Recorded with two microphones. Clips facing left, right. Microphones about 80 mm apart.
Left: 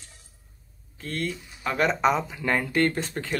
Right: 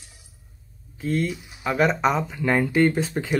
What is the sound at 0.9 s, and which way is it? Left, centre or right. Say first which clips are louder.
Speech: right 6 dB; centre.